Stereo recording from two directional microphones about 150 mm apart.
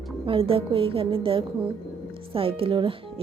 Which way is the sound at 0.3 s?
35° right (ahead or behind).